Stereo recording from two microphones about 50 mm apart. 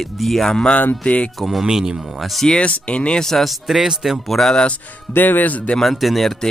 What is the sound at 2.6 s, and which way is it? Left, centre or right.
Speech, left.